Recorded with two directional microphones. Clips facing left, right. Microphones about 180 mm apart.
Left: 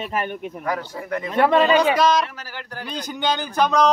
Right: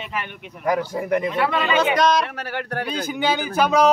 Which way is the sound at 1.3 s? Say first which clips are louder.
Left 5 dB; 40° left (ahead or behind).